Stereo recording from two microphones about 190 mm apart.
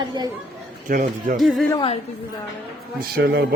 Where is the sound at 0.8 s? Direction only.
45° right (ahead or behind).